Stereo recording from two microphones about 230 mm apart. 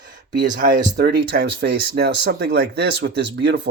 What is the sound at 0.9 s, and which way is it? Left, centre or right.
Speech, right.